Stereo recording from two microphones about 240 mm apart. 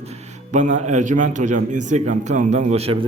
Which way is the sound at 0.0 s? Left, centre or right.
Right.